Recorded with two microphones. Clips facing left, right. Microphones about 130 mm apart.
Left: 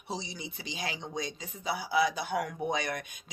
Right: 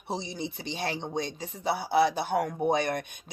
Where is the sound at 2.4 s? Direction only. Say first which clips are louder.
Right 6 dB; 45° right (ahead or behind).